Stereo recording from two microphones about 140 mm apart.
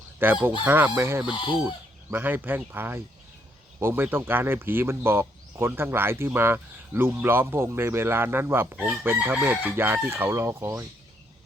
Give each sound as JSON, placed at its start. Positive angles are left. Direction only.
{"t": 0.2, "sound": "speech", "side_deg": -15}
{"t": 1.3, "sound": "chicken", "side_deg": 35}
{"t": 1.6, "sound": "speech", "side_deg": -15}